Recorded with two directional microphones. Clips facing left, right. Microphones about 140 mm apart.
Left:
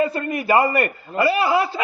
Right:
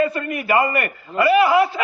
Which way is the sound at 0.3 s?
30° left (ahead or behind).